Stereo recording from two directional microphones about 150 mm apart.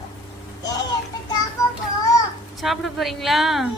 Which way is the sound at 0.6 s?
25° left (ahead or behind).